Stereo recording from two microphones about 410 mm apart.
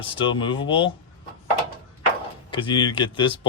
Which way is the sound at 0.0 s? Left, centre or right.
Centre.